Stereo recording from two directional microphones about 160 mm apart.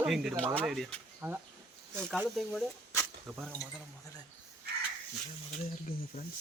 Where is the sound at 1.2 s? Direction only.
10° right (ahead or behind).